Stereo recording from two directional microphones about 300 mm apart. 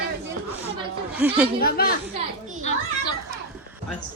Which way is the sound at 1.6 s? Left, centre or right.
Left.